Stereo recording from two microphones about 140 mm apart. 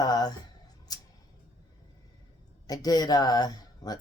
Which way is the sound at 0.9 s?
30° left (ahead or behind).